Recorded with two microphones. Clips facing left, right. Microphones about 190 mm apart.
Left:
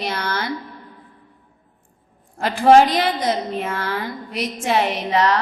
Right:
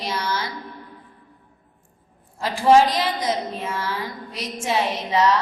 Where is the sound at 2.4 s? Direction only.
60° left (ahead or behind).